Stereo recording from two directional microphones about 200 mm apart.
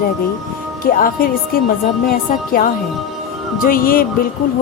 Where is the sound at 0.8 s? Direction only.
45° left (ahead or behind).